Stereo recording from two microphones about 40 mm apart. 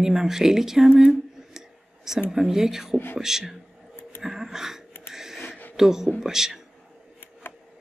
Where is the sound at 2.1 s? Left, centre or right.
Centre.